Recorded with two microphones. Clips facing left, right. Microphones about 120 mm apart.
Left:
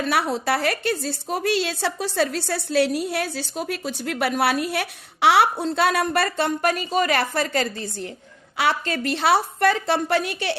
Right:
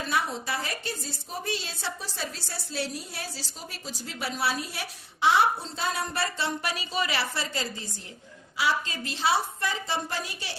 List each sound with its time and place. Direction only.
0.0 s a woman's voice: 70° left (ahead or behind)